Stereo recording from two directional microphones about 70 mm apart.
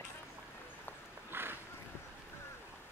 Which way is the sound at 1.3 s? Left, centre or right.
Right.